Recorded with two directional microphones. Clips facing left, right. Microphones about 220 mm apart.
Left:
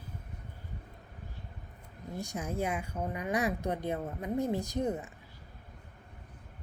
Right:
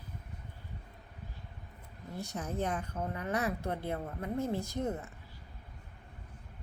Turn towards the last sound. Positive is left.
turn(degrees=15)  # may be behind; listen again after turning